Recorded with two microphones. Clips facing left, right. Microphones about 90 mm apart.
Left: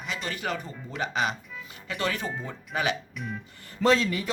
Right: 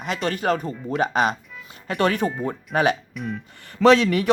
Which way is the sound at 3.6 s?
75° right (ahead or behind).